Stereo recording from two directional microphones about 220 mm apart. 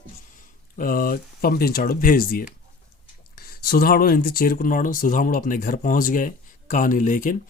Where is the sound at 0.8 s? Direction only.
40° left (ahead or behind).